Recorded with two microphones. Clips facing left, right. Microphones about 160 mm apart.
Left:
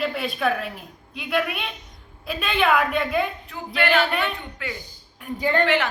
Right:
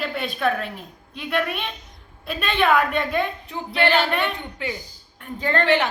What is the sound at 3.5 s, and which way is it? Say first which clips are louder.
Child singing: right 2 dB; 30° right (ahead or behind).